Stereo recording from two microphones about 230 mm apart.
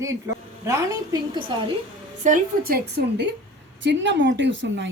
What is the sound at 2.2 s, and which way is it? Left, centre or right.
A woman's voice, right.